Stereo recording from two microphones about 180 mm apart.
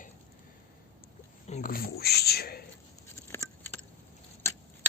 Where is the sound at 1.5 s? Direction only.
40° left (ahead or behind).